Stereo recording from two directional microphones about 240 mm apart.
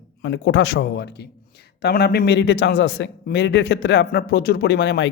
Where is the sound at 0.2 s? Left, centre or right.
Left.